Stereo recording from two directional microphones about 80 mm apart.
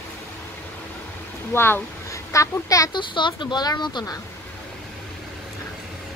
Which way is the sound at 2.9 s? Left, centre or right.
Left.